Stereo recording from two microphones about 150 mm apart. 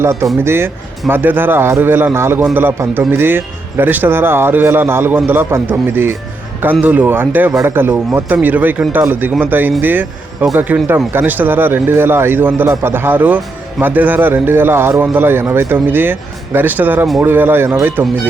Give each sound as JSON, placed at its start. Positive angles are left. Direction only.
{"t": 0.0, "sound": "a man's voice", "side_deg": -15}